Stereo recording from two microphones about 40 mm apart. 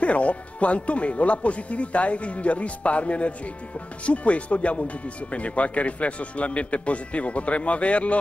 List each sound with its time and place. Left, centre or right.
0.0 s speech: left